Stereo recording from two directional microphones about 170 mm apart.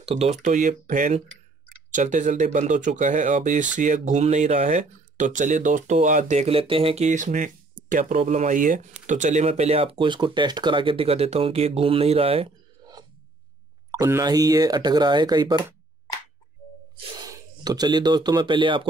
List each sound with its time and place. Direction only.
0.0 s speech: 35° right (ahead or behind)
13.9 s speech: 20° right (ahead or behind)
17.2 s speech: 20° right (ahead or behind)